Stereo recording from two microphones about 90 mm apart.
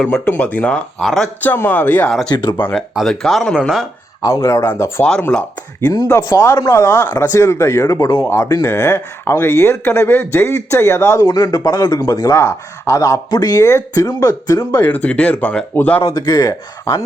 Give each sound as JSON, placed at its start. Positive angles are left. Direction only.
{"t": 0.3, "sound": "speech", "side_deg": 15}
{"t": 0.9, "sound": "speech", "side_deg": 5}
{"t": 1.4, "sound": "speech", "side_deg": 20}
{"t": 2.3, "sound": "speech", "side_deg": 60}
{"t": 2.9, "sound": "speech", "side_deg": 0}
{"t": 4.2, "sound": "speech", "side_deg": 40}
{"t": 4.6, "sound": "speech", "side_deg": 25}
{"t": 5.8, "sound": "a man's voice", "side_deg": 45}
{"t": 6.2, "sound": "speech", "side_deg": 35}
{"t": 14.7, "sound": "speech", "side_deg": 20}
{"t": 16.0, "sound": "a man's voice", "side_deg": 45}